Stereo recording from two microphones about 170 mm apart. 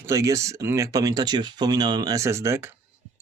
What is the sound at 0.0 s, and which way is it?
Speech, 15° right (ahead or behind).